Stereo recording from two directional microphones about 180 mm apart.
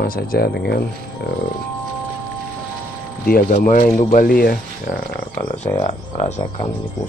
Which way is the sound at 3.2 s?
55° left (ahead or behind).